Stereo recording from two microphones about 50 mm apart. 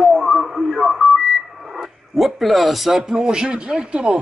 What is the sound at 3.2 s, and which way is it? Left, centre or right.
Speech, centre.